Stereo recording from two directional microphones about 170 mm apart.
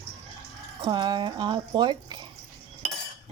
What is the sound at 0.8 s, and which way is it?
Speech, 25° right (ahead or behind).